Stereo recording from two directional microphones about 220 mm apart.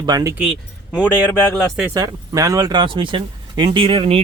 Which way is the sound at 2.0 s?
15° right (ahead or behind).